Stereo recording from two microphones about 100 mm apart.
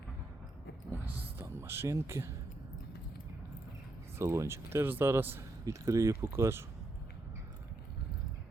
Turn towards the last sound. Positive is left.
turn(degrees=-25)  # may be behind; listen again after turning